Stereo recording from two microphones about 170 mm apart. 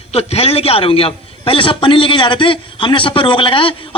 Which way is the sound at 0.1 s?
35° left (ahead or behind).